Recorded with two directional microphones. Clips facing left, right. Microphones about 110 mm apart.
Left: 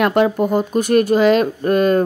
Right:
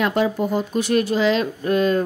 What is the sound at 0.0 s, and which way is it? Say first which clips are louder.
A woman's voice: left 5 dB; 60° left (ahead or behind).